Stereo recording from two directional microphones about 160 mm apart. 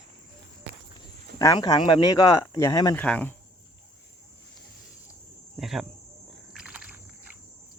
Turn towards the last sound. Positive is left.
turn(degrees=-10)  # may be behind; listen again after turning